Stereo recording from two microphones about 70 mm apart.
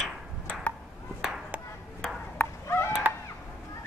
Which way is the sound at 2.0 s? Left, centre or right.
Centre.